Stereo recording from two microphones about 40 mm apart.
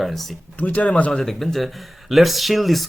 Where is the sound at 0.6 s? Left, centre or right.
Left.